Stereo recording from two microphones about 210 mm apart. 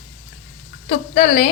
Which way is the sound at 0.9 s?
30° left (ahead or behind).